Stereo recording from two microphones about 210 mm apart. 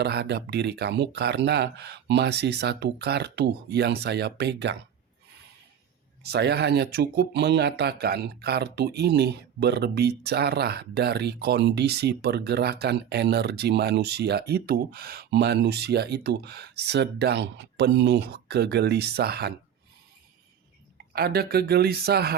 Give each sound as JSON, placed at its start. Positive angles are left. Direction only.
{"t": 0.0, "sound": "speech", "side_deg": -50}
{"t": 6.2, "sound": "speech", "side_deg": -50}
{"t": 21.1, "sound": "speech", "side_deg": -50}